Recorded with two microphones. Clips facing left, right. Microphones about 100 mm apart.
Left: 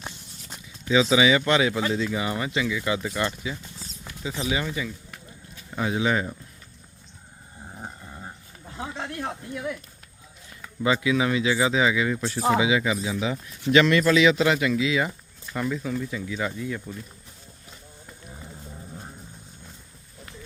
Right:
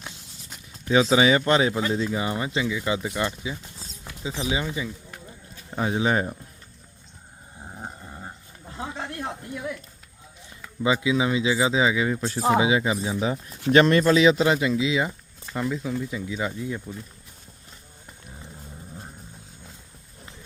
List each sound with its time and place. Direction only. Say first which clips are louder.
0.9 s speech: right 1 dB; 40° right (ahead or behind)
7.8 s dog: right 1 dB; 10° right (ahead or behind)
10.8 s speech: even; 20° right (ahead or behind); by 14.0 s 45° right (ahead or behind)
14.0 s speech: right 1 dB; 35° right (ahead or behind)
15.6 s speech: even; 10° right (ahead or behind)